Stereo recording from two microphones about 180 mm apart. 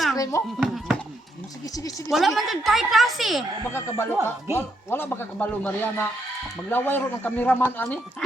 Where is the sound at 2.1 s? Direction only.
Centre (ahead or behind).